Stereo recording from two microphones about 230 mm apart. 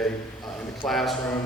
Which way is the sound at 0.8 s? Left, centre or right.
Centre.